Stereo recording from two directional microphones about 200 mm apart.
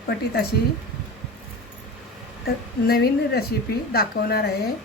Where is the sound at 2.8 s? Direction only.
50° left (ahead or behind).